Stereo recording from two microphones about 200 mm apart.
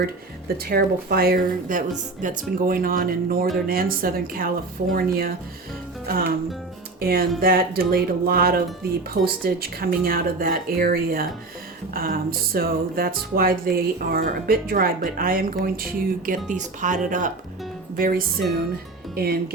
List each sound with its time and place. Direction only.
0.0 s music: 50° right (ahead or behind)
17.9 s speech: 45° right (ahead or behind)
19.1 s music: 50° right (ahead or behind)